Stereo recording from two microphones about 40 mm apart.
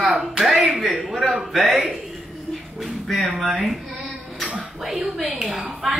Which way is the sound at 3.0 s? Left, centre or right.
Centre.